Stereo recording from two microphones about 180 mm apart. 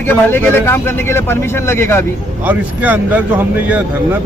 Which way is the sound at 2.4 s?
10° right (ahead or behind).